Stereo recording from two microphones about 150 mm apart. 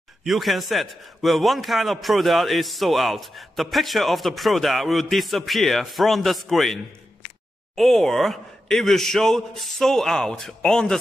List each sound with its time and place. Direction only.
0.2 s a man's voice: centre (ahead or behind)